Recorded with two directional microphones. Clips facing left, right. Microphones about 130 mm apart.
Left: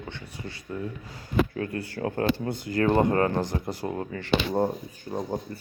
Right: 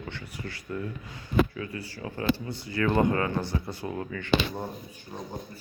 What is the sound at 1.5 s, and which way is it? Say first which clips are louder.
Speech: left 5 dB; 50° left (ahead or behind).